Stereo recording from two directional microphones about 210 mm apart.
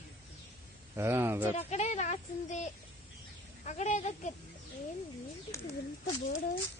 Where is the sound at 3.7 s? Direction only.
35° left (ahead or behind).